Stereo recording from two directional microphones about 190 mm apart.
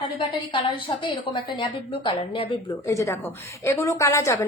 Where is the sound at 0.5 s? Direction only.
25° left (ahead or behind).